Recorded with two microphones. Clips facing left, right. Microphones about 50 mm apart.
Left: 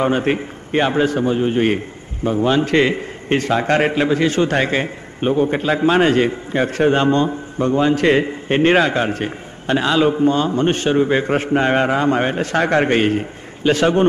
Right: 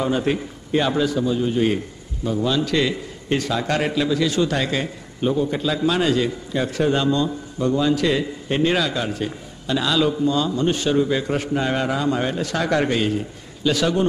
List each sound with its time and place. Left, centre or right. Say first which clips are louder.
0.0 s a man's voice: left 4 dB; left